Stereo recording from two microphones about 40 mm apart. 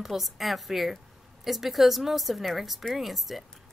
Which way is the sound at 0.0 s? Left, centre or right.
Centre.